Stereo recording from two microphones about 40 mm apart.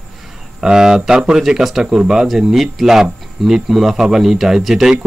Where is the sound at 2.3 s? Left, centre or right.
Centre.